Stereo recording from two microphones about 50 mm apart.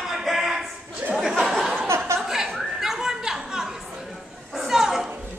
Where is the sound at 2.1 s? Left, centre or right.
Centre.